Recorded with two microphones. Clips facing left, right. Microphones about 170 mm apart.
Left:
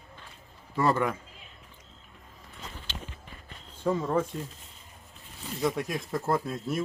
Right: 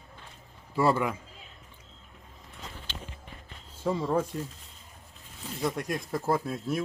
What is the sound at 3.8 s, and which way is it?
Speech, 10° right (ahead or behind).